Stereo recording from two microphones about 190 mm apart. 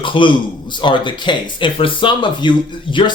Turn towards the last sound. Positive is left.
turn(degrees=25)  # may be behind; listen again after turning